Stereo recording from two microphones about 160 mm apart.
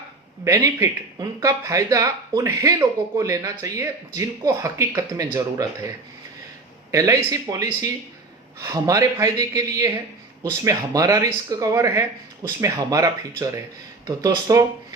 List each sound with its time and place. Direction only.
0.4 s speech: 20° right (ahead or behind)
6.9 s speech: 20° right (ahead or behind)